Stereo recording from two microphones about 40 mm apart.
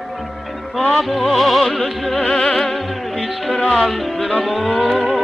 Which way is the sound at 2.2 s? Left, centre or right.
Left.